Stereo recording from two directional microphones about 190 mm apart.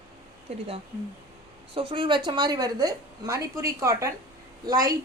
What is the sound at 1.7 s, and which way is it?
A woman's voice, 30° right (ahead or behind).